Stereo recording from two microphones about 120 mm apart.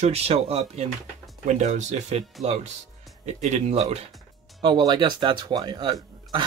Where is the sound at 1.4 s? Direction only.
80° right; by 2.7 s 60° right (ahead or behind).